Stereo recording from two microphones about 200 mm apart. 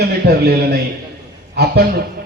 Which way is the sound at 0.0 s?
50° right (ahead or behind).